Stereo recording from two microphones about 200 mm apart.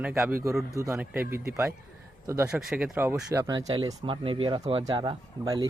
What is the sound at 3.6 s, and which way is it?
Speech, 25° right (ahead or behind).